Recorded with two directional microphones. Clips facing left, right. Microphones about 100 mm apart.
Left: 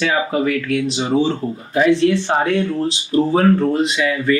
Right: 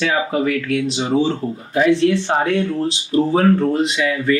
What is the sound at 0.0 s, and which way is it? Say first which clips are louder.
Speech: even; 15° left (ahead or behind).